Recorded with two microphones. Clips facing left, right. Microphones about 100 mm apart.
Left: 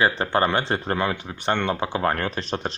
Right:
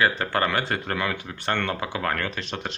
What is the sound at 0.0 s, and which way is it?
Speech, 25° left (ahead or behind).